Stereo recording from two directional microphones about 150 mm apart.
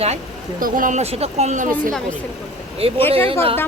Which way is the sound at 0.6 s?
70° right (ahead or behind).